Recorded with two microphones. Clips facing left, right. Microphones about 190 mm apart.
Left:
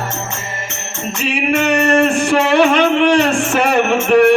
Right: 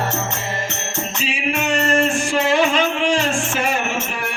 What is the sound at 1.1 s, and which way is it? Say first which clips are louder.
Music: left 8 dB; 65° left (ahead or behind).